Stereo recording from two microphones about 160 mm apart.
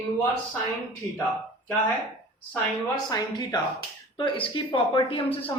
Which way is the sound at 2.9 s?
25° left (ahead or behind).